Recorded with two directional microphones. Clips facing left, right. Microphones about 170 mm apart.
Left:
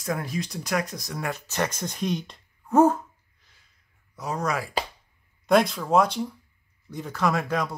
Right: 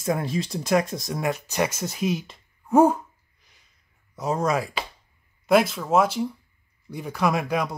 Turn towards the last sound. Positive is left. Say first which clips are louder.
# right 1 dB
turn(degrees=-10)  # may be behind; listen again after turning